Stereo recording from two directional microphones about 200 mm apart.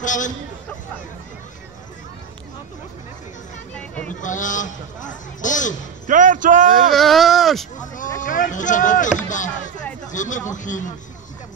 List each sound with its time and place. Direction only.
0.0 s a man's voice: 40° left (ahead or behind)
3.7 s a sound: 5° left (ahead or behind)
4.2 s a man's voice: 40° left (ahead or behind)
6.0 s speech: 40° right (ahead or behind)
6.9 s speech: centre (ahead or behind)
7.8 s a sound: 40° left (ahead or behind)
8.2 s a man's voice: 40° left (ahead or behind)
10.1 s a man's voice: 40° left (ahead or behind)